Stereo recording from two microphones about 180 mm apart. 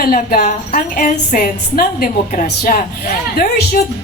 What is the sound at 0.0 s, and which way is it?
A woman's voice, 50° left (ahead or behind).